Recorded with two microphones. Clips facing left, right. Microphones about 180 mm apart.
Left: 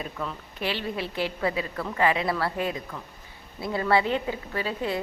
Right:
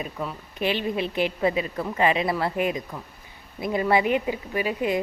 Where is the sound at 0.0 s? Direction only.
15° right (ahead or behind).